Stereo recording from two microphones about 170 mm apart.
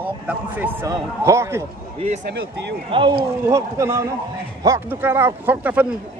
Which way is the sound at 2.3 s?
80° right.